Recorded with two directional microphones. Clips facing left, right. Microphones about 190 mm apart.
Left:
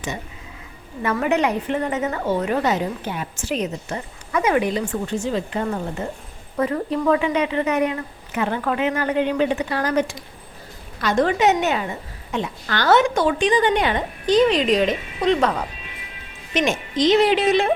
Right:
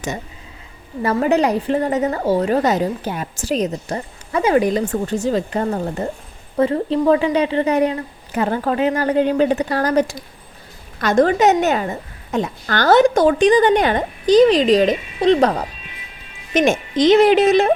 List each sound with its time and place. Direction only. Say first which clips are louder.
1.0 s a woman's voice: right 4 dB; 35° right (ahead or behind)
6.6 s a woman's voice: right 5 dB; 30° right (ahead or behind)
16.6 s a woman's voice: right 5 dB; 50° right (ahead or behind)